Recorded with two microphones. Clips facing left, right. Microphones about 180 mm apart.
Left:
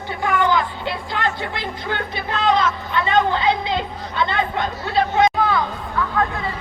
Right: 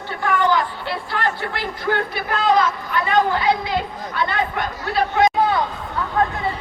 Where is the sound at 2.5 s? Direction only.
25° left (ahead or behind).